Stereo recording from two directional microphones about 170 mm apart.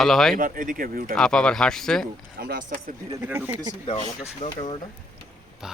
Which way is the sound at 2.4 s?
60° right (ahead or behind).